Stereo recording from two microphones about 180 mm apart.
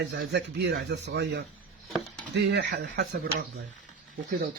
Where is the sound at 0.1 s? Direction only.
70° right (ahead or behind).